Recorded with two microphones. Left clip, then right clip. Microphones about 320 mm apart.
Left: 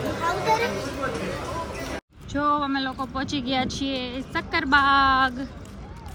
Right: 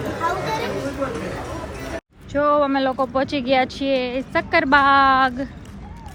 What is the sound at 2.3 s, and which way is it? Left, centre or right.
Speech, centre.